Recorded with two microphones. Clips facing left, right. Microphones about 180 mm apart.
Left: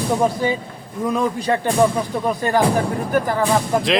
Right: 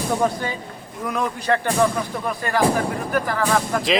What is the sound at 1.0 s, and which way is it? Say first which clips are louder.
Speech: left 4 dB; 20° left (ahead or behind).